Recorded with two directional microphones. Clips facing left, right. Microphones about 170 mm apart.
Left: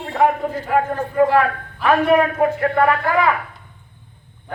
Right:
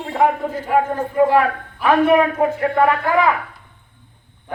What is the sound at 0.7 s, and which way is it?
A woman's voice, 15° right (ahead or behind).